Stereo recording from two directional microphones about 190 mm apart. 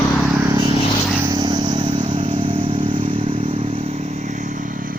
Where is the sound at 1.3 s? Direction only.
20° right (ahead or behind).